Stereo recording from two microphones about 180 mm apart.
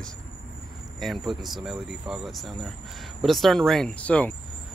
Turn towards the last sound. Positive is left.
turn(degrees=10)  # may be behind; listen again after turning